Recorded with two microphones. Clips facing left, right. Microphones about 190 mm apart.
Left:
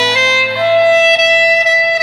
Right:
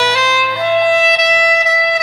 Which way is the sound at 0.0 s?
25° left (ahead or behind).